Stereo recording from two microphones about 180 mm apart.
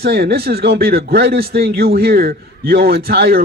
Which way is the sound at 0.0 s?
60° right (ahead or behind).